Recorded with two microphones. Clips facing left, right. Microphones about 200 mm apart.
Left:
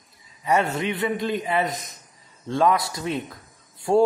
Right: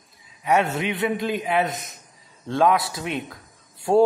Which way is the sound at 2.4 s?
Centre (ahead or behind).